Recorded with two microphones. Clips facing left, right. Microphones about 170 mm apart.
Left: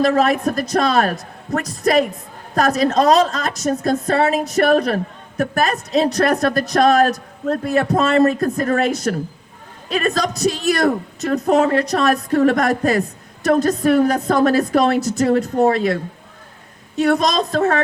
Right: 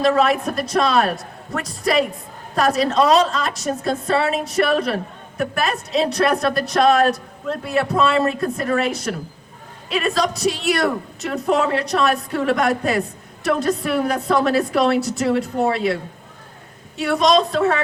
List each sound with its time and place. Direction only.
0.0 s a woman's voice: 40° left (ahead or behind)
17.0 s a woman's voice: 40° left (ahead or behind)